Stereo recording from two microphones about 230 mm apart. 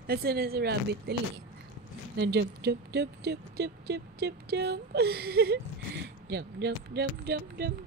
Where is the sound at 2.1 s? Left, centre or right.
Right.